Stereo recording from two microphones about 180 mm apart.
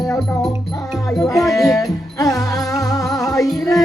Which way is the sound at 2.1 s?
20° left (ahead or behind).